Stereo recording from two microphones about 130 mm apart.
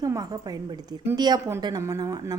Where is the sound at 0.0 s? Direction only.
30° right (ahead or behind).